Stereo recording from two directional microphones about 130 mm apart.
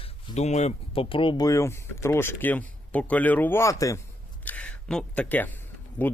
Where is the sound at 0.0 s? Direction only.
60° left (ahead or behind); by 1.5 s 40° left (ahead or behind).